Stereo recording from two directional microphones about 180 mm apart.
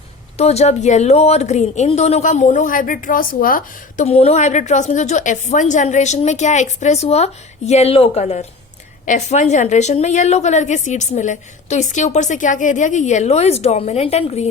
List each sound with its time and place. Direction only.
0.3 s a woman's voice: 35° left (ahead or behind); by 4.0 s 50° left (ahead or behind)
4.0 s a woman's voice: 35° left (ahead or behind)